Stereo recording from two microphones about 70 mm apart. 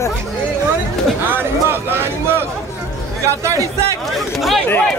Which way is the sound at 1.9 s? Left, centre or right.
Right.